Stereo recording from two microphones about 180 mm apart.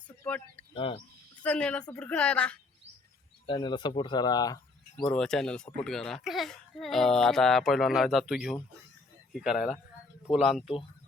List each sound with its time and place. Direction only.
0.2 s speech: 10° left (ahead or behind)
0.7 s speech: 30° left (ahead or behind)
1.4 s a woman's voice: 5° left (ahead or behind)
3.4 s speech: 25° left (ahead or behind)
4.9 s speech: 5° left (ahead or behind)